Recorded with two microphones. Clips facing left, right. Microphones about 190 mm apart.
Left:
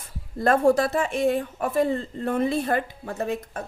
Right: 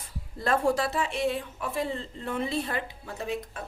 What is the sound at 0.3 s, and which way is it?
A woman's voice, 50° left (ahead or behind).